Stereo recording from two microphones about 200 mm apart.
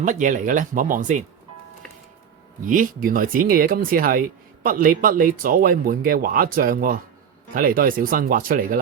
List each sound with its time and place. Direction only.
0.0 s speech: 40° right (ahead or behind)
2.6 s speech: 40° right (ahead or behind)